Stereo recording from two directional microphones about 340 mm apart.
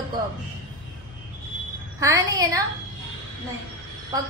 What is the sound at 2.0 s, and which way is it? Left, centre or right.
Speech, centre.